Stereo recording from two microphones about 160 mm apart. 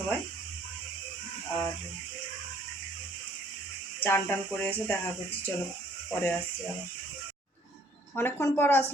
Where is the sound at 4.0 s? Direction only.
15° left (ahead or behind).